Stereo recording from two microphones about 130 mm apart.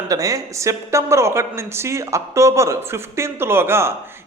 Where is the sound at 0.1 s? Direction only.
25° right (ahead or behind).